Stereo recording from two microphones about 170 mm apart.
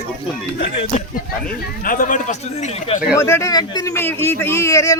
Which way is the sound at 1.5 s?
55° left (ahead or behind).